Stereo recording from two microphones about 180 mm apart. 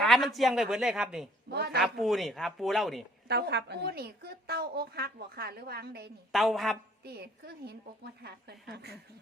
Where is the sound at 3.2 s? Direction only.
65° right (ahead or behind).